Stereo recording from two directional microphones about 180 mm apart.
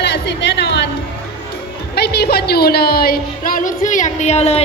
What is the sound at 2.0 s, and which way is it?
A woman's voice, 65° left (ahead or behind).